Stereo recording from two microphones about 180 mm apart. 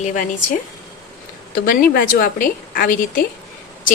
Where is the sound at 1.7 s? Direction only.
55° left (ahead or behind).